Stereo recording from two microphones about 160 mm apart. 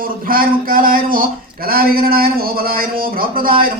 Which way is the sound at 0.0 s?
65° right (ahead or behind).